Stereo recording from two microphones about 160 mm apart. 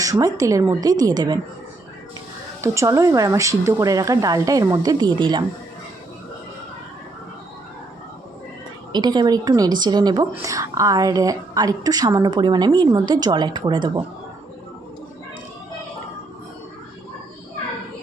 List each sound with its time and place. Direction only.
0.0 s a woman's voice: 20° right (ahead or behind)
2.6 s a woman's voice: 20° right (ahead or behind)
8.9 s a woman's voice: 25° right (ahead or behind)